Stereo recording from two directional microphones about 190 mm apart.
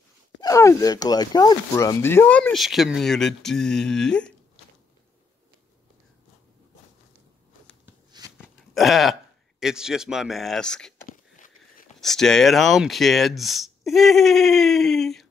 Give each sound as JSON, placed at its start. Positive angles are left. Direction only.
{"t": 0.4, "sound": "speech", "side_deg": 15}
{"t": 8.4, "sound": "speech", "side_deg": 0}
{"t": 11.1, "sound": "a sound", "side_deg": 45}
{"t": 12.0, "sound": "speech", "side_deg": 0}